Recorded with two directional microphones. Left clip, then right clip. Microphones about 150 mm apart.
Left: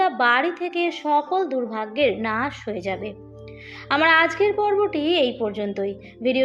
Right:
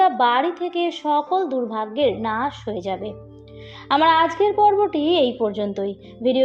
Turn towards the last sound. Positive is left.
turn(degrees=-25)  # may be behind; listen again after turning